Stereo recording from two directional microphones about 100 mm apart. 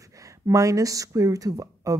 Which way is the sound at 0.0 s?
35° right (ahead or behind).